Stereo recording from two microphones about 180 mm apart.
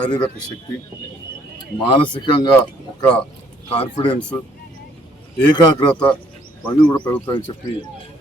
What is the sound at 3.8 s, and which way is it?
Speech, 25° left (ahead or behind).